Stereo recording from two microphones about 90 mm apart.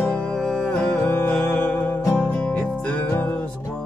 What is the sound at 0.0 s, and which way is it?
Music, 15° left (ahead or behind).